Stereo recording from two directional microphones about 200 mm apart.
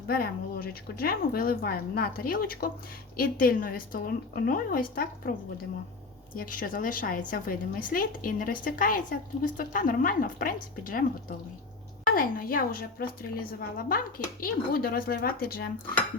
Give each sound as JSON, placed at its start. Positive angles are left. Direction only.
{"t": 0.1, "sound": "a woman's voice", "side_deg": 45}
{"t": 6.3, "sound": "a woman's voice", "side_deg": 45}